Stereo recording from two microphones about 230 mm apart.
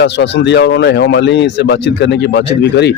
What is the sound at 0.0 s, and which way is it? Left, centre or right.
Speech, left.